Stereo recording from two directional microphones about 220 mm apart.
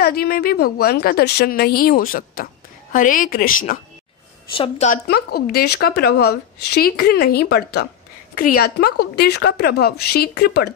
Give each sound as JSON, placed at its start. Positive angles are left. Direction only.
{"t": 0.0, "sound": "a woman's voice", "side_deg": 45}
{"t": 4.5, "sound": "speech", "side_deg": 25}
{"t": 5.0, "sound": "a woman's voice", "side_deg": 45}